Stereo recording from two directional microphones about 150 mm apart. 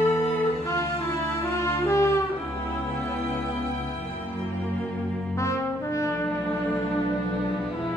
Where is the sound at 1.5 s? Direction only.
20° left (ahead or behind).